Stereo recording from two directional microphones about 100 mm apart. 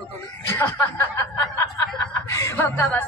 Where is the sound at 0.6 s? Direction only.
25° left (ahead or behind).